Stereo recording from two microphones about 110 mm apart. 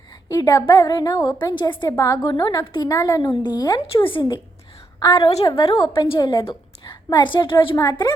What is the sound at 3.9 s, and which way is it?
Speech, 50° left (ahead or behind).